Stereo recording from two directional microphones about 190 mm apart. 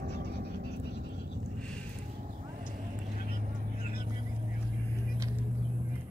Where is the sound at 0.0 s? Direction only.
55° right (ahead or behind).